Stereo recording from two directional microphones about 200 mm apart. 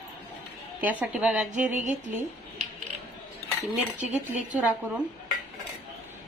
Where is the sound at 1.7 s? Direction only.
40° right (ahead or behind).